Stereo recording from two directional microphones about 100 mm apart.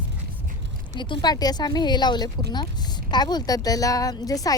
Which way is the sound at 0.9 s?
50° left (ahead or behind).